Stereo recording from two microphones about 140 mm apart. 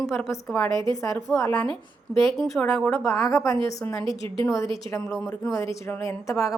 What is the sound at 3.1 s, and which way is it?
Speech, 20° left (ahead or behind).